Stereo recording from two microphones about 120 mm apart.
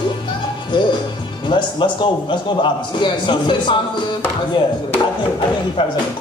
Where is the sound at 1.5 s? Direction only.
40° left (ahead or behind).